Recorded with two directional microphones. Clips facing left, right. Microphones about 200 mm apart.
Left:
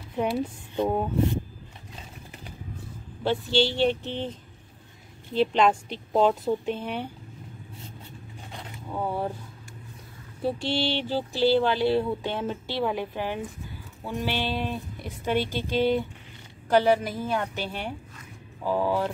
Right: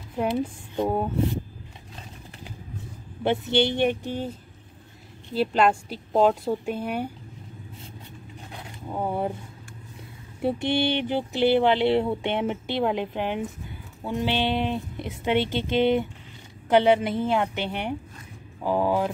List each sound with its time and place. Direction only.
0.7 s speech: 5° right (ahead or behind)
3.3 s a woman's voice: 20° right (ahead or behind)
8.9 s a woman's voice: 20° right (ahead or behind)
10.4 s a woman's voice: 20° right (ahead or behind)